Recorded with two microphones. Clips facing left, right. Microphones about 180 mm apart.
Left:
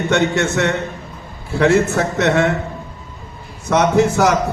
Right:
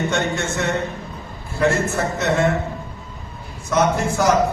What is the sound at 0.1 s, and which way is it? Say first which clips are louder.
A man's voice: left 6 dB; 75° left (ahead or behind).